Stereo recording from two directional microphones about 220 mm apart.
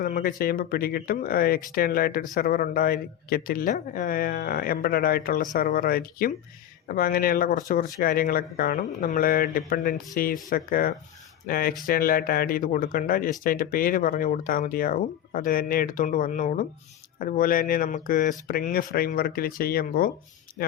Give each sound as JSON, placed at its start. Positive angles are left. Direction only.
{"t": 0.0, "sound": "speech", "side_deg": 40}